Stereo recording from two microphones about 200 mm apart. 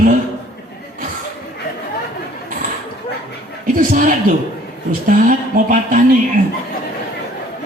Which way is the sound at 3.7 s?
45° right (ahead or behind).